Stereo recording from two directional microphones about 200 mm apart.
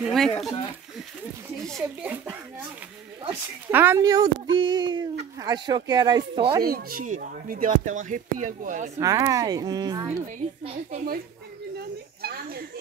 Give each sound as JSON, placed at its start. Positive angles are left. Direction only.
{"t": 0.0, "sound": "speech", "side_deg": 0}
{"t": 1.7, "sound": "speech", "side_deg": -5}
{"t": 3.7, "sound": "speech", "side_deg": -10}
{"t": 6.6, "sound": "speech", "side_deg": -50}
{"t": 9.0, "sound": "speech", "side_deg": -15}
{"t": 10.2, "sound": "speech", "side_deg": -35}
{"t": 12.2, "sound": "speech", "side_deg": -50}